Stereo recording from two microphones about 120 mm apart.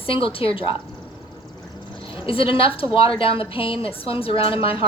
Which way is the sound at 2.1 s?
50° left (ahead or behind).